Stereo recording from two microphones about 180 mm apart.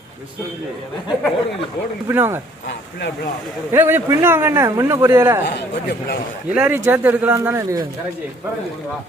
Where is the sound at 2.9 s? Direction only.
70° left (ahead or behind).